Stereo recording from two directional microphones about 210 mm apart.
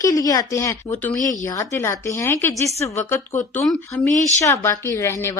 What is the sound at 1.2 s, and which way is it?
Speech, 40° left (ahead or behind).